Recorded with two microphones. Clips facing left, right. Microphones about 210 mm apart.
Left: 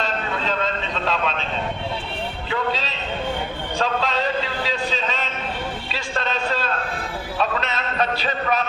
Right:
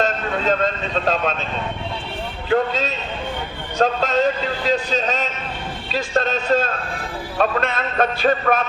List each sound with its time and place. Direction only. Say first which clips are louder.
0.0 s vehicle: right 5 dB; 45° right (ahead or behind)
2.5 s a man's voice: right 7 dB; 45° right (ahead or behind)